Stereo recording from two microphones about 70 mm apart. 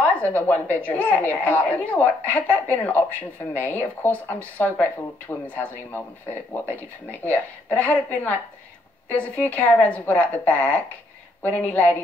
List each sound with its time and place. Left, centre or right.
0.0 s a woman's voice: left